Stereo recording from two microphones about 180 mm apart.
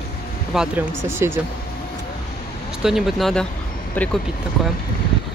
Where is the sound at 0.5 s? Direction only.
5° right (ahead or behind).